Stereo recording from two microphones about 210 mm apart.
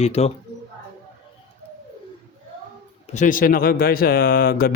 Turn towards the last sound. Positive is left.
turn(degrees=45)  # may be behind; listen again after turning